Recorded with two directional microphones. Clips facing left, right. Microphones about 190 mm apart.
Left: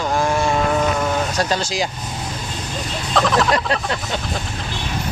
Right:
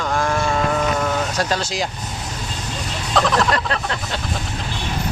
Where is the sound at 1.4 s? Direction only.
Centre (ahead or behind).